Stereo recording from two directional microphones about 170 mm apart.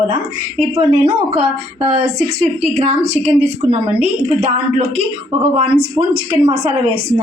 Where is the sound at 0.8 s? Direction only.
35° right (ahead or behind).